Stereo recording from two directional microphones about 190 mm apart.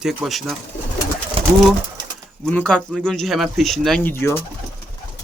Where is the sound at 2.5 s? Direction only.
5° left (ahead or behind).